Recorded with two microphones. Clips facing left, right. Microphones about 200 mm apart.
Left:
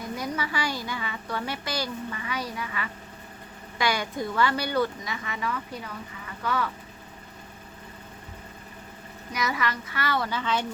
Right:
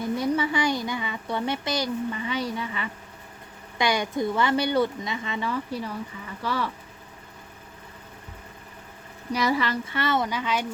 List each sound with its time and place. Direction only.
0.2 s a woman's voice: 25° right (ahead or behind)
9.3 s a woman's voice: 30° right (ahead or behind); by 10.7 s 10° right (ahead or behind)